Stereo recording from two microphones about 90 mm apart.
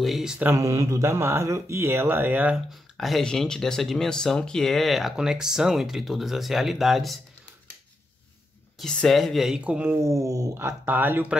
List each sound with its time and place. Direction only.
0.0 s speech: 5° right (ahead or behind)
0.6 s speech: 35° right (ahead or behind)
2.5 s speech: centre (ahead or behind)
8.7 s speech: 5° left (ahead or behind)
9.6 s speech: 15° right (ahead or behind)
10.0 s speech: 35° right (ahead or behind)
10.6 s speech: 25° right (ahead or behind)